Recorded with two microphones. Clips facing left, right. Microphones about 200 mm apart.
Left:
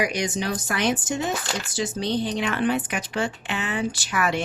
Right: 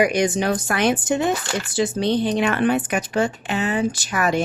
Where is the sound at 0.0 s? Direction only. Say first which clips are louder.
Right 7 dB; 55° right (ahead or behind).